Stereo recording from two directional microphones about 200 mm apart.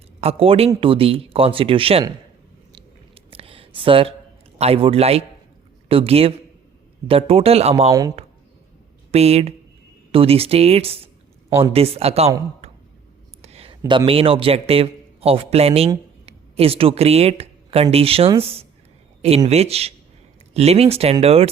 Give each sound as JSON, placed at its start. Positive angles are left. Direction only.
{"t": 0.2, "sound": "speech", "side_deg": -30}
{"t": 3.2, "sound": "a sound", "side_deg": -30}
{"t": 3.8, "sound": "speech", "side_deg": -25}
{"t": 9.1, "sound": "speech", "side_deg": -30}
{"t": 13.4, "sound": "a man's voice", "side_deg": -30}